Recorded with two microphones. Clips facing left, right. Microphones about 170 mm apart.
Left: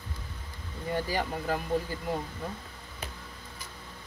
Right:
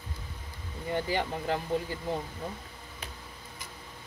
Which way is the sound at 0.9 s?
25° right (ahead or behind).